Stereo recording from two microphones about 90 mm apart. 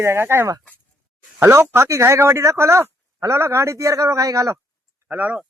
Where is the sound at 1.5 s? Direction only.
30° right (ahead or behind).